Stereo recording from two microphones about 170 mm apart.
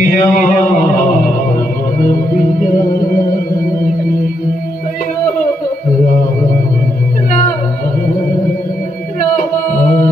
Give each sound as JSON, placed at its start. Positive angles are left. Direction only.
{"t": 0.0, "sound": "music", "side_deg": 55}
{"t": 9.4, "sound": "music", "side_deg": 55}